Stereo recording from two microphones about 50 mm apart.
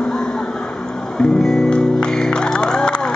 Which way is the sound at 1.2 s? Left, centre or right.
Centre.